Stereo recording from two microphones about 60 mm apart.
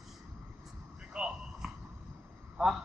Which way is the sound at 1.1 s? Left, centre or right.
Centre.